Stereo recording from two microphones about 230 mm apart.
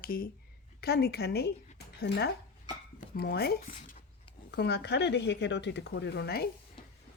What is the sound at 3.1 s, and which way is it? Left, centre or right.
Speech, left.